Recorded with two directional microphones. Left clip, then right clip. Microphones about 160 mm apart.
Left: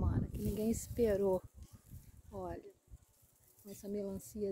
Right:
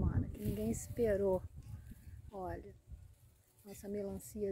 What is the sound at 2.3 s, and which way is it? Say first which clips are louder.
Speech: even; 15° left (ahead or behind).